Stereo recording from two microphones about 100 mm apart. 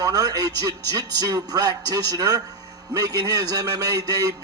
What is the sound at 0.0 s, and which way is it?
A man's voice, 40° right (ahead or behind).